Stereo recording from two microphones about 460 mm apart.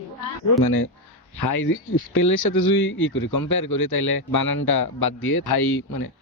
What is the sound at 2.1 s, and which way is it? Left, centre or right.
Speech, left.